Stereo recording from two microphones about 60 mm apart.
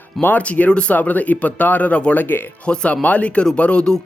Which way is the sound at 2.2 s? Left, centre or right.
Left.